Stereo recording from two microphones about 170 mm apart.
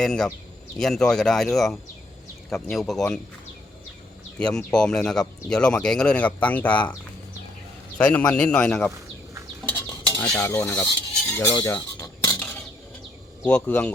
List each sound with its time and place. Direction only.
0.0 s speech: 5° left (ahead or behind)
4.4 s speech: 5° left (ahead or behind)
7.9 s a man's voice: 5° left (ahead or behind)
9.6 s stir: 15° left (ahead or behind)
10.2 s speech: 5° left (ahead or behind)
10.5 s stir: 15° left (ahead or behind)
11.5 s a sound: 20° left (ahead or behind)
13.4 s speech: 10° left (ahead or behind)